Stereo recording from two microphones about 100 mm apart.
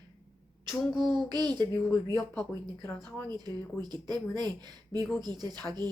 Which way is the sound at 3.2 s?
45° right (ahead or behind).